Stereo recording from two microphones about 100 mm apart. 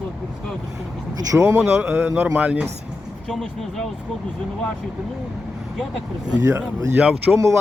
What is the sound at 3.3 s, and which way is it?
Speech, centre (ahead or behind).